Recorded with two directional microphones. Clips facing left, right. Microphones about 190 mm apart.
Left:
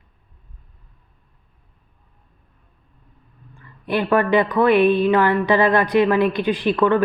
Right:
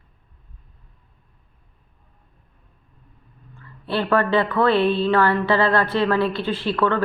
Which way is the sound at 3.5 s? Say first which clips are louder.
Left 3 dB; 15° left (ahead or behind).